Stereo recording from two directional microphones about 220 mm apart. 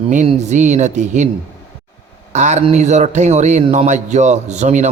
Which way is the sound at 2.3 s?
30° right (ahead or behind).